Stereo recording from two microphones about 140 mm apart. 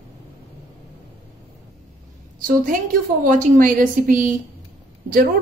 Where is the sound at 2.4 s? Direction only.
80° right.